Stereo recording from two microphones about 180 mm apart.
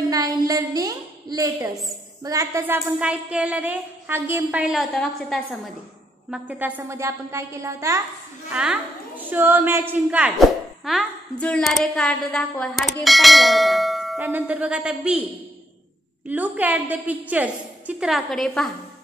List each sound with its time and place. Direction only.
0.1 s a woman's voice: 20° right (ahead or behind); by 5.6 s centre (ahead or behind)
6.3 s a woman's voice: 10° right (ahead or behind)
13.0 s bell: centre (ahead or behind)
14.2 s a woman's voice: 10° right (ahead or behind)
16.3 s a woman's voice: 10° right (ahead or behind)